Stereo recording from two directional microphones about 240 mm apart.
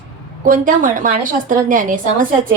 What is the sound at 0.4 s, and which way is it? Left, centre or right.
A woman's voice, right.